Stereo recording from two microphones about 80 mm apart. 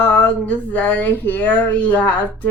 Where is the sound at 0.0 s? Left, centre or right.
Left.